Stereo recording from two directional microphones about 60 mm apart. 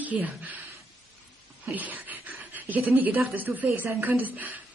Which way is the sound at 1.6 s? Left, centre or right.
Right.